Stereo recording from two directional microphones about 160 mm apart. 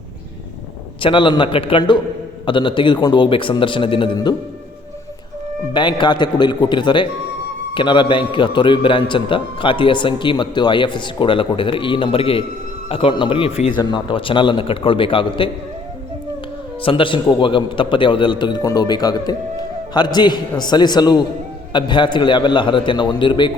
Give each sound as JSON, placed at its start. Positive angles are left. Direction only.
{"t": 1.0, "sound": "a man's voice", "side_deg": 30}
{"t": 5.7, "sound": "a man's voice", "side_deg": 30}
{"t": 16.8, "sound": "a man's voice", "side_deg": 30}